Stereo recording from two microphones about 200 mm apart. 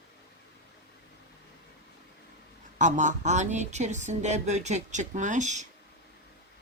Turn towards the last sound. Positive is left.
turn(degrees=-35)  # may be behind; listen again after turning